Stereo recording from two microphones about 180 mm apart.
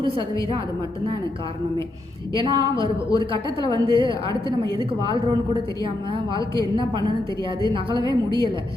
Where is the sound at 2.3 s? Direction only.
25° right (ahead or behind).